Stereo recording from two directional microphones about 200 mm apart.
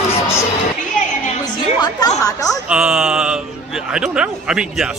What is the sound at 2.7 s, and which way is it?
Speech, 5° right (ahead or behind).